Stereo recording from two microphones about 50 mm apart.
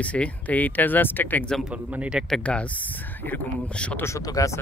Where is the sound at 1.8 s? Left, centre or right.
Right.